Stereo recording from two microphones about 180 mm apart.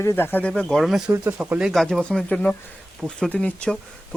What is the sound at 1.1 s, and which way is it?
Speech, 10° right (ahead or behind).